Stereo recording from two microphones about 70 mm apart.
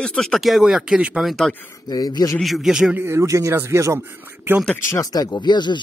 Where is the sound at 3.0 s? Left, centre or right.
Right.